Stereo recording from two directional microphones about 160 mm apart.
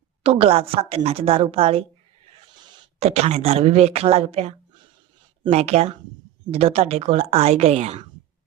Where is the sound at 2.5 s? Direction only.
25° right (ahead or behind).